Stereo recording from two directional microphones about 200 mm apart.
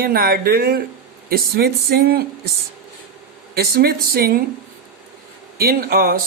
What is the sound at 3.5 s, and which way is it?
Speech, 50° right (ahead or behind).